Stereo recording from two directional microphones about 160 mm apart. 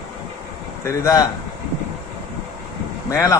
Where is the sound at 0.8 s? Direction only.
20° left (ahead or behind).